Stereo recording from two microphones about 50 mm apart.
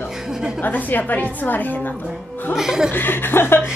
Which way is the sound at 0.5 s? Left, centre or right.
Left.